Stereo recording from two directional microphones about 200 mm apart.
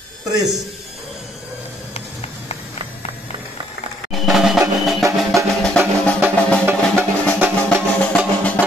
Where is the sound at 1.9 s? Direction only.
30° left (ahead or behind).